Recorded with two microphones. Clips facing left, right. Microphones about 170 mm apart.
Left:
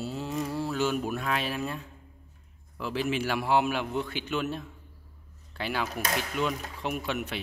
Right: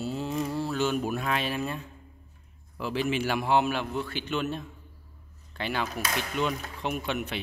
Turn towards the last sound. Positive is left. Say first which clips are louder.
# right 1 dB
turn(degrees=5)  # may be behind; listen again after turning